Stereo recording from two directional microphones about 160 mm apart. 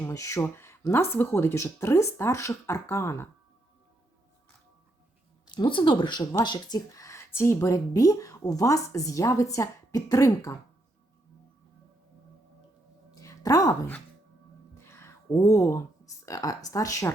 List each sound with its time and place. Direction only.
0.0 s speech: 20° left (ahead or behind)
5.5 s speech: 30° left (ahead or behind)
13.1 s a sound: 20° left (ahead or behind)
14.8 s speech: 15° left (ahead or behind)